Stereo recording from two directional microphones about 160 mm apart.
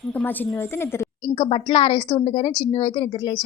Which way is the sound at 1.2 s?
30° left (ahead or behind).